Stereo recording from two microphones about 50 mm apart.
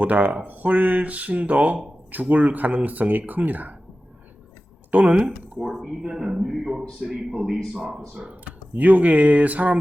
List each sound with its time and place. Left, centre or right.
0.0 s speech: right
5.0 s speech: right
5.5 s speech: centre
6.0 s a man's voice: centre
8.1 s speech: right